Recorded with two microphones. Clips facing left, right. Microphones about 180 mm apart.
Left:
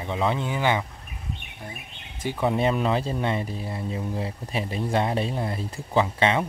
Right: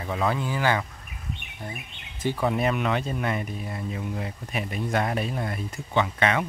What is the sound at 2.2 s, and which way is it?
Speech, 15° left (ahead or behind).